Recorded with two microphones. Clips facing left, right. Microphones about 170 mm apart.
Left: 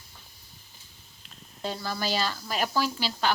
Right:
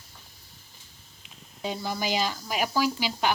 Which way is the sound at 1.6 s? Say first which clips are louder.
Right 1 dB; 15° right (ahead or behind).